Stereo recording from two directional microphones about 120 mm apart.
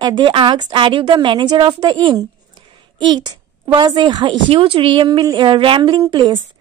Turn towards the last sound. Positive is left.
turn(degrees=-40)  # may be behind; listen again after turning